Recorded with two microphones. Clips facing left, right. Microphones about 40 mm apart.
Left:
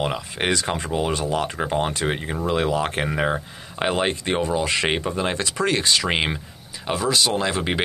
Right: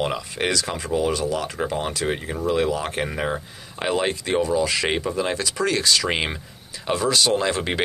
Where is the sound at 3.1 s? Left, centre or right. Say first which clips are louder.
Left 3 dB; centre.